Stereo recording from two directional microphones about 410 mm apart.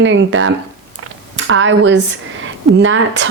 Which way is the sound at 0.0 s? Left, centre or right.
Right.